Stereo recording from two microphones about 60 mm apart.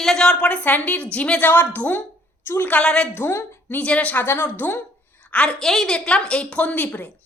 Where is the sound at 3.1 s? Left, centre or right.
Left.